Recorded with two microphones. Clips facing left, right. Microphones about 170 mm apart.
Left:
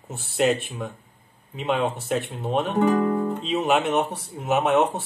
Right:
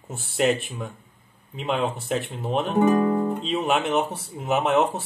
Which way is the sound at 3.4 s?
Centre (ahead or behind).